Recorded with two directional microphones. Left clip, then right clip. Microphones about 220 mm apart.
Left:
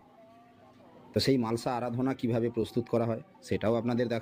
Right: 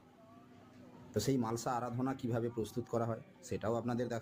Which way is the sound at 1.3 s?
25° left (ahead or behind).